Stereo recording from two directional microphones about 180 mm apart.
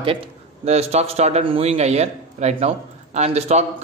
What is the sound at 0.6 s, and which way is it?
A man's voice, 35° right (ahead or behind).